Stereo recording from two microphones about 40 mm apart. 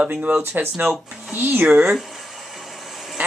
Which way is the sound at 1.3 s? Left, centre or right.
Right.